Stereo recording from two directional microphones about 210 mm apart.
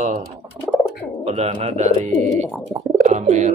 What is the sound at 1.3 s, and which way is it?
Speech, 30° right (ahead or behind).